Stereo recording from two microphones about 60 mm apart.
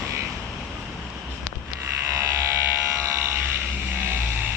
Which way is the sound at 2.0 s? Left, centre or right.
Right.